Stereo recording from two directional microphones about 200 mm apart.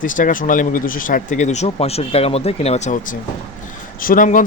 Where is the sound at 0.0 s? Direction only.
40° left (ahead or behind).